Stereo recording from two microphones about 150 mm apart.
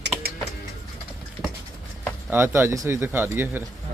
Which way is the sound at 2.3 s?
15° right (ahead or behind).